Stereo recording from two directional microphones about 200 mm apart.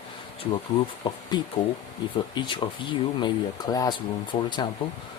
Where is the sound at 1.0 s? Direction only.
20° left (ahead or behind).